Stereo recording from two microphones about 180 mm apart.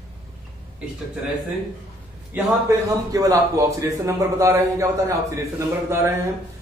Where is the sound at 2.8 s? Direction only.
20° right (ahead or behind).